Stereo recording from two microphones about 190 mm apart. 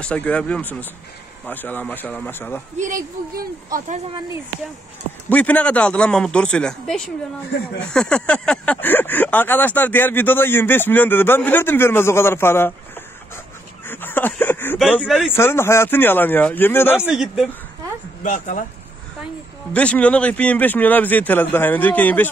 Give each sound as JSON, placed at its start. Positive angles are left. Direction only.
{"t": 0.0, "sound": "speech", "side_deg": 5}
{"t": 2.8, "sound": "speech", "side_deg": -45}
{"t": 5.3, "sound": "speech", "side_deg": 5}
{"t": 13.8, "sound": "speech", "side_deg": 10}
{"t": 15.0, "sound": "speech", "side_deg": -5}
{"t": 15.3, "sound": "speech", "side_deg": 15}
{"t": 17.0, "sound": "speech", "side_deg": 0}
{"t": 18.2, "sound": "speech", "side_deg": 40}
{"t": 19.7, "sound": "speech", "side_deg": 5}